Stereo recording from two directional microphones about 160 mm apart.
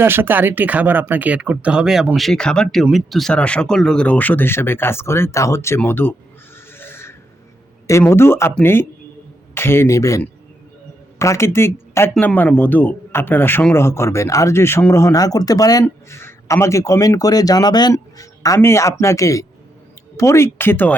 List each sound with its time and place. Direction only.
0.0 s speech: 15° right (ahead or behind); by 6.1 s 10° left (ahead or behind)
6.7 s a sound: 15° left (ahead or behind)
7.9 s a man's voice: 15° left (ahead or behind)